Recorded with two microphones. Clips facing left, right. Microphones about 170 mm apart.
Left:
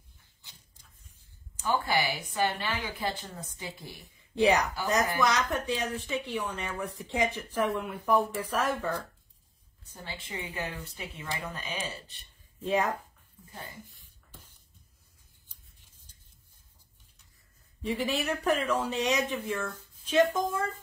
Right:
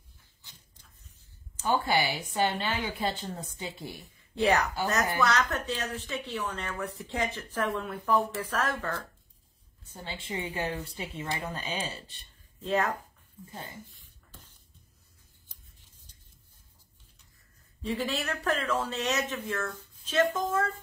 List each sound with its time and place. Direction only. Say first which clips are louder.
0.4 s a sound: right 1 dB; 15° left (ahead or behind)
1.6 s speech: right 1 dB; 25° right (ahead or behind)
4.0 s a woman's voice: left 3 dB; 15° left (ahead or behind)
10.0 s speech: right 4 dB; 25° right (ahead or behind)
12.6 s a woman's voice: even; 15° left (ahead or behind)
17.8 s a woman's voice: left 2 dB; 15° left (ahead or behind)